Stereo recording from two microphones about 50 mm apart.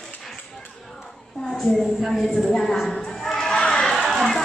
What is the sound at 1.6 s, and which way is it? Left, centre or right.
Speech, centre.